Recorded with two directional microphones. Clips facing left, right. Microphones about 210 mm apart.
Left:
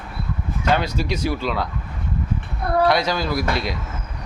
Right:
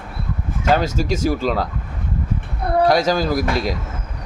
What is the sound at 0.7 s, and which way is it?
Speech, 45° right (ahead or behind).